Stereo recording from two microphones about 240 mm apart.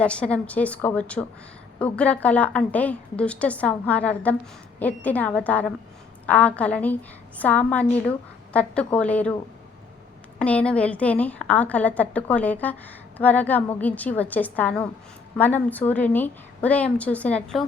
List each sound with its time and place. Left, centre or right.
0.0 s a woman's voice: centre
10.3 s a woman's voice: centre